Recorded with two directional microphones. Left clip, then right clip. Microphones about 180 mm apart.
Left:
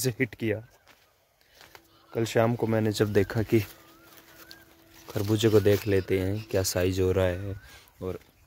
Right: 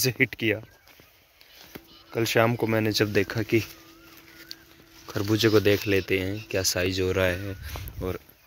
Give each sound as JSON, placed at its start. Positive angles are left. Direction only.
{"t": 0.0, "sound": "speech", "side_deg": 10}
{"t": 1.7, "sound": "speech", "side_deg": 10}
{"t": 2.9, "sound": "speech", "side_deg": 25}
{"t": 4.5, "sound": "a sound", "side_deg": 20}
{"t": 5.1, "sound": "speech", "side_deg": 20}
{"t": 7.2, "sound": "speech", "side_deg": 15}